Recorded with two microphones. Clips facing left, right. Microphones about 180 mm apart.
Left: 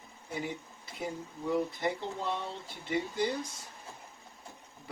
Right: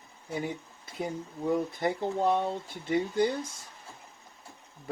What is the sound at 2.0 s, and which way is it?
Speech, 50° right (ahead or behind).